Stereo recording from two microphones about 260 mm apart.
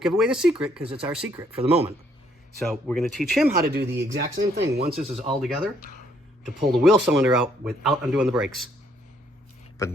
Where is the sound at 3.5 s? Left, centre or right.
Right.